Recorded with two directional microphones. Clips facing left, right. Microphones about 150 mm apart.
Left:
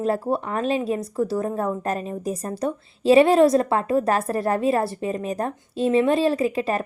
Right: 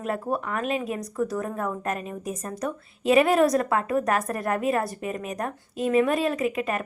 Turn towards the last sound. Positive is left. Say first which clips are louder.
# left 4 dB
turn(degrees=30)  # may be behind; listen again after turning